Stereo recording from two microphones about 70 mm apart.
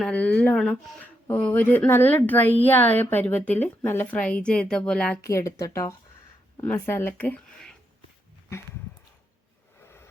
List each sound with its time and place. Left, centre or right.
0.0 s a woman's voice: centre
4.1 s speech: centre
5.2 s speech: left
6.8 s speech: left
9.8 s vehicle: left